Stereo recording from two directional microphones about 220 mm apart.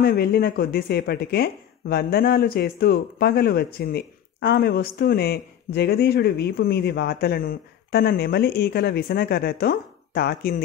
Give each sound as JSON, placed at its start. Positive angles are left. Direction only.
{"t": 0.0, "sound": "speech", "side_deg": 45}